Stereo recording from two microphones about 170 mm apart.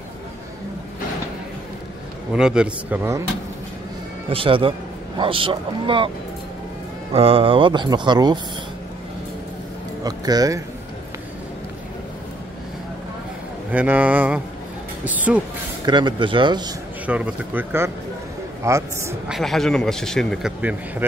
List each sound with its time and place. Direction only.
2.3 s speech: 5° right (ahead or behind)
4.3 s a man's voice: 30° right (ahead or behind)
7.1 s speech: 35° right (ahead or behind)
10.0 s speech: 20° right (ahead or behind)
13.7 s speech: 10° right (ahead or behind)
15.8 s speech: 25° right (ahead or behind)
17.0 s speech: 10° right (ahead or behind)
19.2 s a man's voice: centre (ahead or behind)